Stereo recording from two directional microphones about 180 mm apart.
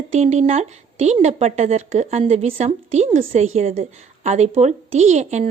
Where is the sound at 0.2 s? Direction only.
40° right (ahead or behind).